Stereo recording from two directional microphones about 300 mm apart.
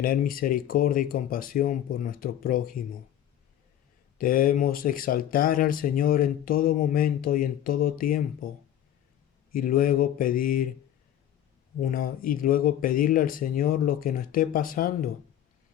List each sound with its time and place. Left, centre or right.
0.0 s speech: left
4.2 s speech: left
9.5 s speech: left
11.8 s speech: left